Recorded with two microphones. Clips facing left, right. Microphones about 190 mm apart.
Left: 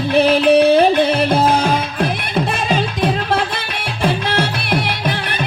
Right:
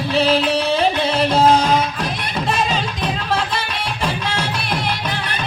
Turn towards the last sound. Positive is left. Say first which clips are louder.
# left 4 dB
turn(degrees=60)  # may be behind; listen again after turning